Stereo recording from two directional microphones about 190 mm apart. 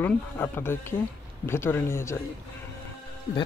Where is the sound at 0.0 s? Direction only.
10° left (ahead or behind).